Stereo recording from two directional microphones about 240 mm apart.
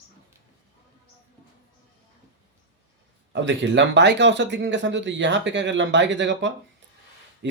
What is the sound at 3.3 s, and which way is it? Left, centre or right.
Speech, right.